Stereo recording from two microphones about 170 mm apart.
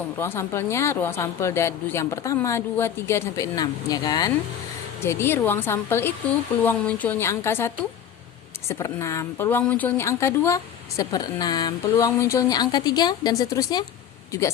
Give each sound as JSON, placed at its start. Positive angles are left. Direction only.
{"t": 0.2, "sound": "a woman's voice", "side_deg": 15}